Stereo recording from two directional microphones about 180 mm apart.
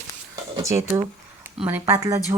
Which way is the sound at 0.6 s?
15° right (ahead or behind).